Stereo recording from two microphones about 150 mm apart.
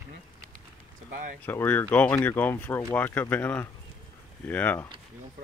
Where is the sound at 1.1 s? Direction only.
65° right (ahead or behind).